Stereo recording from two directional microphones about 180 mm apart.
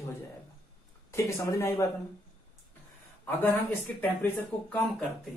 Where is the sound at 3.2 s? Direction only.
10° left (ahead or behind).